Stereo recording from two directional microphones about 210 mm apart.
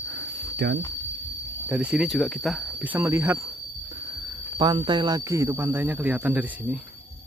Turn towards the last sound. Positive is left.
turn(degrees=-5)  # may be behind; listen again after turning